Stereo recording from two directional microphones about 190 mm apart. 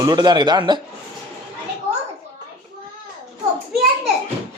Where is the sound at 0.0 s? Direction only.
20° right (ahead or behind).